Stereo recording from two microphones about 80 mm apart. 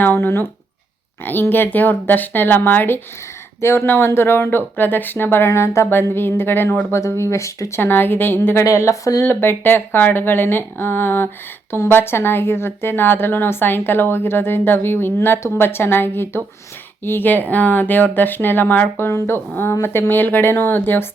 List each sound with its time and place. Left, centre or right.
0.2 s speech: left
7.8 s speech: left
8.6 s speech: left
9.2 s speech: left